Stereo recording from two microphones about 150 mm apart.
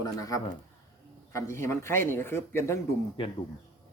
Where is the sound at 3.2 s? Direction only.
35° left (ahead or behind).